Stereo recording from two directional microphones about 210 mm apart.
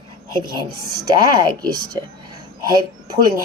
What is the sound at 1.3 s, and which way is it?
Speech, 20° right (ahead or behind).